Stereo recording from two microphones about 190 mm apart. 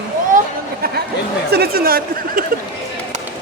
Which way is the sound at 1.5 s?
55° right (ahead or behind).